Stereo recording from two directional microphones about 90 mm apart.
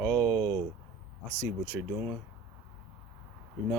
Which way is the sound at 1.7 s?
5° right (ahead or behind).